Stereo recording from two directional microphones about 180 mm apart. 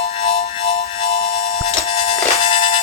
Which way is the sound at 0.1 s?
30° left (ahead or behind).